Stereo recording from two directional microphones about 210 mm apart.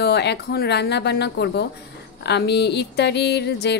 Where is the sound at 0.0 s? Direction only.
55° left (ahead or behind).